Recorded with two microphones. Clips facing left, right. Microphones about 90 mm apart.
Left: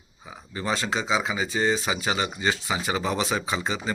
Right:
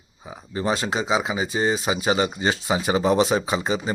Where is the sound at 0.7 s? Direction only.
15° right (ahead or behind).